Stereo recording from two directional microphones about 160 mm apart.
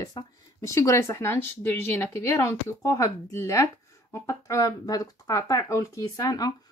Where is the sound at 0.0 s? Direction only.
25° left (ahead or behind).